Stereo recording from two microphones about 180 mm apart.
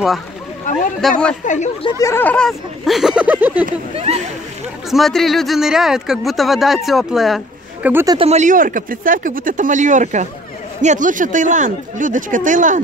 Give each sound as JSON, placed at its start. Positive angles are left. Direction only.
{"t": 1.0, "sound": "speech", "side_deg": 0}
{"t": 1.4, "sound": "speech", "side_deg": 45}
{"t": 1.8, "sound": "speech", "side_deg": 25}
{"t": 2.0, "sound": "speech", "side_deg": 10}
{"t": 3.9, "sound": "speech", "side_deg": -35}
{"t": 4.9, "sound": "speech", "side_deg": 0}
{"t": 7.9, "sound": "speech", "side_deg": -15}
{"t": 8.2, "sound": "speech", "side_deg": -40}